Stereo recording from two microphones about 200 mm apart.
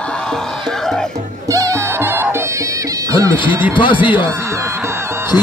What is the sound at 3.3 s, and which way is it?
Speech, 25° left (ahead or behind).